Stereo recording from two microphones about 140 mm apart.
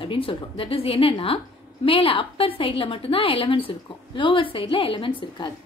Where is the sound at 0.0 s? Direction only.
40° left (ahead or behind).